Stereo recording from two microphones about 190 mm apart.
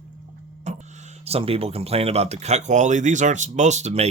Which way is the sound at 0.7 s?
35° right (ahead or behind).